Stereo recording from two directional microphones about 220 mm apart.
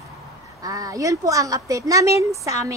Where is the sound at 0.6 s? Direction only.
15° right (ahead or behind).